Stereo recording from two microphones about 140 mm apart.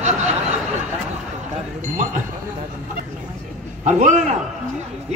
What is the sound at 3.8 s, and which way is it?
Speech, 60° right (ahead or behind).